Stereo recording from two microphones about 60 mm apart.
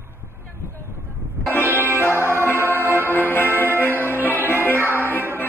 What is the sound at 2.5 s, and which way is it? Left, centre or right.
Music, right.